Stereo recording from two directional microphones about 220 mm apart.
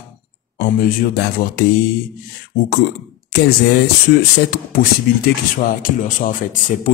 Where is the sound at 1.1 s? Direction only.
45° left (ahead or behind).